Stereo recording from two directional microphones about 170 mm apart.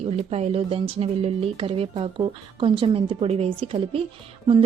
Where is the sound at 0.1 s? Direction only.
40° right (ahead or behind).